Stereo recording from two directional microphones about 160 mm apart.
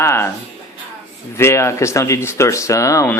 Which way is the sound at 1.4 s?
15° left (ahead or behind).